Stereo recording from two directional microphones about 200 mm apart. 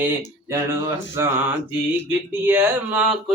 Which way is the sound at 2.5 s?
10° right (ahead or behind).